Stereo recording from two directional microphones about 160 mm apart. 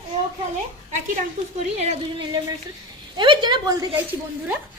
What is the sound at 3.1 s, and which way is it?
Speech, 30° right (ahead or behind).